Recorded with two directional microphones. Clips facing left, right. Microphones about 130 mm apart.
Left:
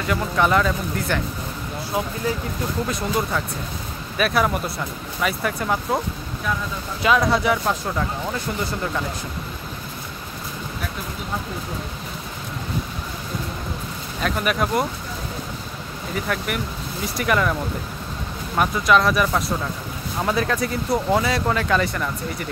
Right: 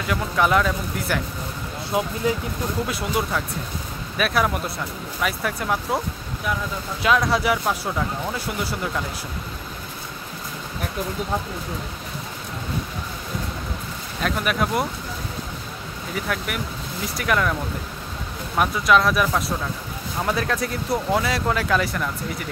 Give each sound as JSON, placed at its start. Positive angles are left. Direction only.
{"t": 0.0, "sound": "speech", "side_deg": 0}
{"t": 1.9, "sound": "speech", "side_deg": -20}
{"t": 2.9, "sound": "speech", "side_deg": -5}
{"t": 14.2, "sound": "speech", "side_deg": 0}
{"t": 16.3, "sound": "speech", "side_deg": 0}
{"t": 18.6, "sound": "speech", "side_deg": 0}